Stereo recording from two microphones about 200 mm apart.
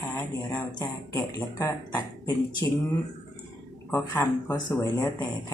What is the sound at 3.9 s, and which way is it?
Speech, 10° left (ahead or behind).